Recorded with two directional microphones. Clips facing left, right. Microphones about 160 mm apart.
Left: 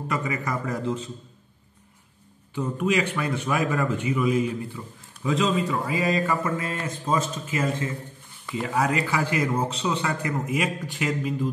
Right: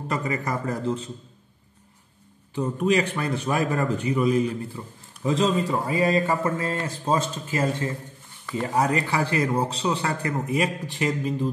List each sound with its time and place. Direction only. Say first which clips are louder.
0.1 s a man's voice: right 1 dB; 35° right (ahead or behind)
2.5 s a man's voice: right 2 dB; 35° right (ahead or behind)